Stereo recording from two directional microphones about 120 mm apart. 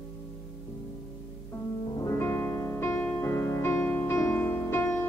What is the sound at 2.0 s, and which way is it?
Music, 20° left (ahead or behind).